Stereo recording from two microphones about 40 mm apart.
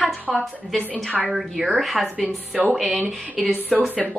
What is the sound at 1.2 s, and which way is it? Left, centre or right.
Speech, centre.